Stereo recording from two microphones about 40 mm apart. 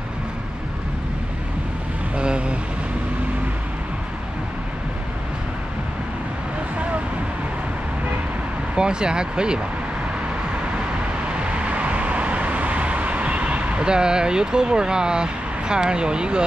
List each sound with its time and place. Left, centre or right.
2.1 s vehicle: right
8.7 s speech: right
11.4 s vehicle: right